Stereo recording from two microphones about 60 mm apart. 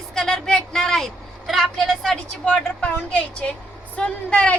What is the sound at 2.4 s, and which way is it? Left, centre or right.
A woman's voice, left.